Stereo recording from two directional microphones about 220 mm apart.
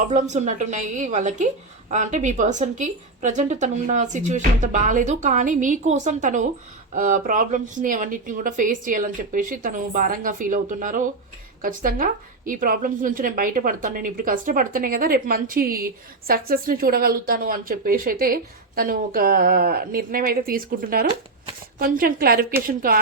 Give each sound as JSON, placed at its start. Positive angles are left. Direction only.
{"t": 0.1, "sound": "a woman's voice", "side_deg": -35}